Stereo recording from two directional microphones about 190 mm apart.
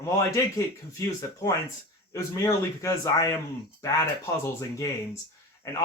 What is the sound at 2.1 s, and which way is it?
Speech, 15° left (ahead or behind).